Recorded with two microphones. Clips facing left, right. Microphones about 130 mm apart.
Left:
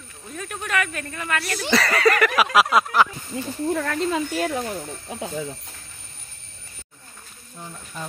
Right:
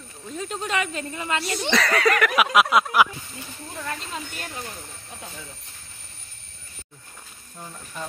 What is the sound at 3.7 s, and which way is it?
Speech, 70° left (ahead or behind).